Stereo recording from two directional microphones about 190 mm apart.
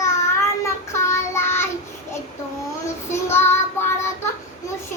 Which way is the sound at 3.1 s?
15° left (ahead or behind).